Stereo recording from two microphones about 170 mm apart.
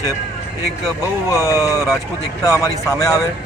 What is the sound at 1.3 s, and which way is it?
A man's voice, 15° left (ahead or behind).